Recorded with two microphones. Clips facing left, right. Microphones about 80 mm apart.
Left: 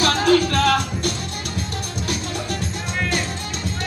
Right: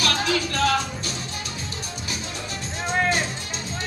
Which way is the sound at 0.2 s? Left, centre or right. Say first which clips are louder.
Left 6 dB; left.